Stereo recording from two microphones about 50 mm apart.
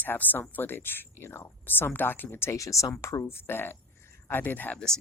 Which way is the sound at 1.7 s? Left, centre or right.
Left.